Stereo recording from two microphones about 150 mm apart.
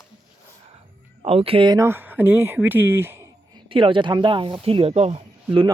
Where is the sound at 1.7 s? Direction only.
15° right (ahead or behind).